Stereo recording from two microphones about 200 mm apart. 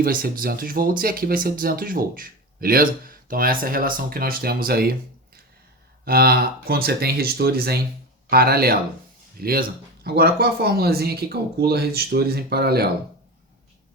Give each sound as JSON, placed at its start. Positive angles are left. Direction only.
{"t": 0.0, "sound": "speech", "side_deg": -45}
{"t": 6.1, "sound": "speech", "side_deg": -50}